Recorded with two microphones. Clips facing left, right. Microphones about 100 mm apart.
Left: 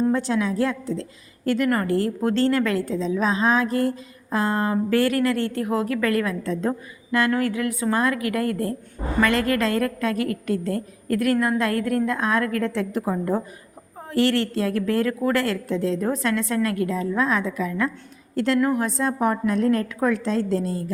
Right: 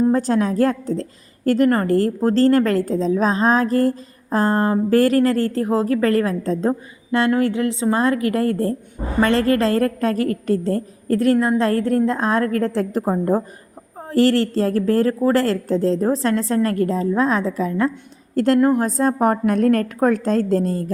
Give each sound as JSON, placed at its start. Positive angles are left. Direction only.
{"t": 0.1, "sound": "a woman's voice", "side_deg": -40}